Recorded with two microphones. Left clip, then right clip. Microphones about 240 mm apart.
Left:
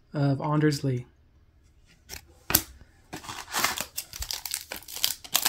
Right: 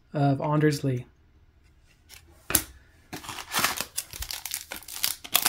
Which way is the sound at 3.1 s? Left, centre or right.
Centre.